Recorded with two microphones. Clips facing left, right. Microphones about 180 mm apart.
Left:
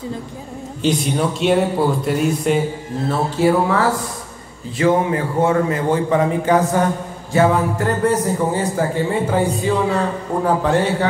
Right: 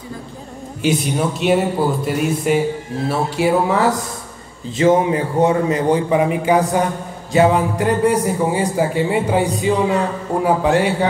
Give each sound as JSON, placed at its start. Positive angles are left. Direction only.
{"t": 0.8, "sound": "a man's voice", "side_deg": -5}
{"t": 3.1, "sound": "a man's voice", "side_deg": -15}